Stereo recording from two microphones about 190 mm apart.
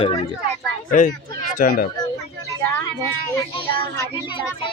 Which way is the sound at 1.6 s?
45° left (ahead or behind).